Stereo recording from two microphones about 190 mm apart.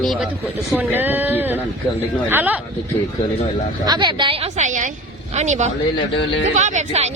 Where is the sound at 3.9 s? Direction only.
25° right (ahead or behind).